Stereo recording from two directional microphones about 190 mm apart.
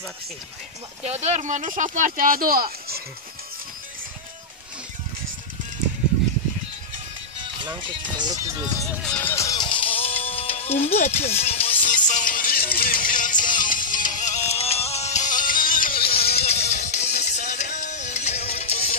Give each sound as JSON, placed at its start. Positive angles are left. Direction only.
{"t": 1.0, "sound": "speech", "side_deg": -35}
{"t": 7.6, "sound": "speech", "side_deg": -25}
{"t": 8.7, "sound": "music", "side_deg": 0}
{"t": 11.9, "sound": "music", "side_deg": 40}
{"t": 16.0, "sound": "music", "side_deg": 30}